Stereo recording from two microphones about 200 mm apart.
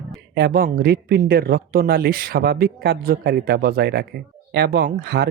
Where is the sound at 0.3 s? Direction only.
55° right (ahead or behind).